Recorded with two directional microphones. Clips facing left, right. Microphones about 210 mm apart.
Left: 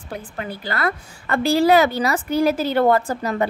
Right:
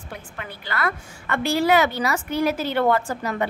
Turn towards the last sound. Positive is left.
turn(degrees=35)  # may be behind; listen again after turning